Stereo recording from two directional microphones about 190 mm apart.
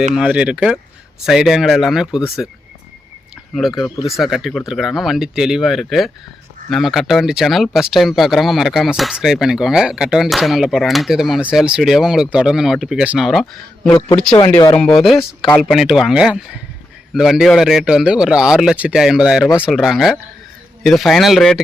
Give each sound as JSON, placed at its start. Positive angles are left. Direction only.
{"t": 0.1, "sound": "speech", "side_deg": -5}
{"t": 3.5, "sound": "speech", "side_deg": 0}
{"t": 13.4, "sound": "speech", "side_deg": 10}
{"t": 14.3, "sound": "speech", "side_deg": 25}
{"t": 14.8, "sound": "speech", "side_deg": 5}
{"t": 15.7, "sound": "speech", "side_deg": 0}